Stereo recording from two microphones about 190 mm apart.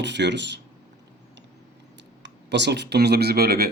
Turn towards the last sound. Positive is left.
turn(degrees=-55)  # may be behind; listen again after turning